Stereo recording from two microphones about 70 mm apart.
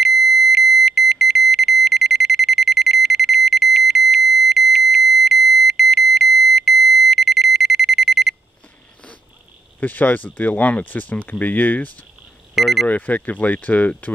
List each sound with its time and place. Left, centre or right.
0.0 s alarm: centre
9.8 s speech: left
12.5 s speech: centre
12.8 s speech: left